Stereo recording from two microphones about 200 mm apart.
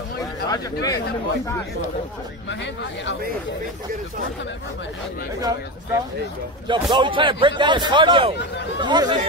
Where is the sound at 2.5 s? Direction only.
65° left (ahead or behind).